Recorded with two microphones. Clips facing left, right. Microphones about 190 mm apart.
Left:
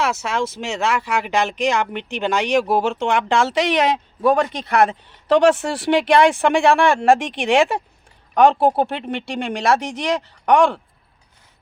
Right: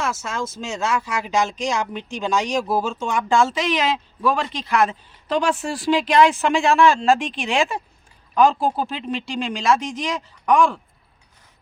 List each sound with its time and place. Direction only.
0.0 s speech: 65° left (ahead or behind)